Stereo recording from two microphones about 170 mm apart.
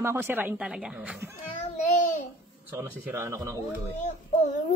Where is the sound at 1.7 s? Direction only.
45° left (ahead or behind).